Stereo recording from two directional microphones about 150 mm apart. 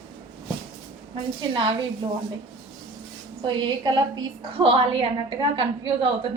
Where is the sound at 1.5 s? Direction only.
35° right (ahead or behind).